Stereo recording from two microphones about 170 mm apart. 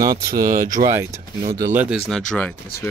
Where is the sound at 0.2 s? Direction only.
55° right (ahead or behind).